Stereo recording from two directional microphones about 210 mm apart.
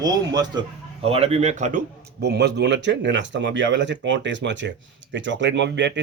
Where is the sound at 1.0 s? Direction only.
30° right (ahead or behind).